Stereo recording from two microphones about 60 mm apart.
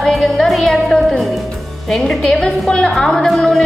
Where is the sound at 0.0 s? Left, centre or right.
Centre.